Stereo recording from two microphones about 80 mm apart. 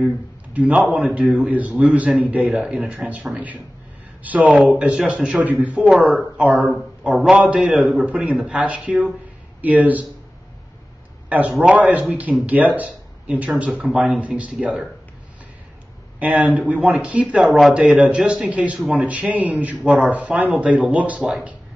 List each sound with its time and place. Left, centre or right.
0.0 s a man's voice: centre
4.2 s a man's voice: centre
11.2 s a man's voice: centre
13.5 s a man's voice: centre
16.2 s a man's voice: centre
17.5 s speech: centre
17.7 s a man's voice: centre